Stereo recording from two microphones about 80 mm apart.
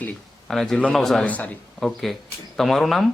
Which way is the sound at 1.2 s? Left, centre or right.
Centre.